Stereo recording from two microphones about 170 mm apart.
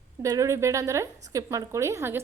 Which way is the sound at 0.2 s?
20° right (ahead or behind).